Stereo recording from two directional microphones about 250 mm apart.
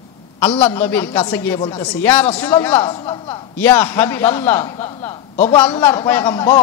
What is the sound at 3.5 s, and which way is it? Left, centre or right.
A man's voice, centre.